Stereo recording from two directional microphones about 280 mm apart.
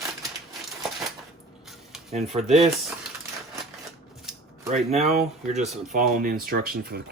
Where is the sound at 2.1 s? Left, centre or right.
Right.